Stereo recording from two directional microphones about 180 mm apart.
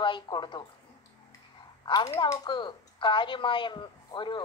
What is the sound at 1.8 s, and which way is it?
A woman's voice, 20° left (ahead or behind).